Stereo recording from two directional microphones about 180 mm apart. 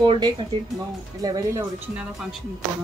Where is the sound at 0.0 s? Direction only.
25° right (ahead or behind).